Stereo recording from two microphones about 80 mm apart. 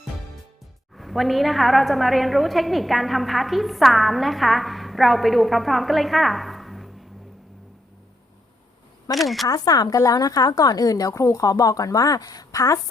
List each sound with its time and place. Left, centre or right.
0.9 s a woman's voice: centre
9.1 s a woman's voice: centre
9.5 s a woman's voice: left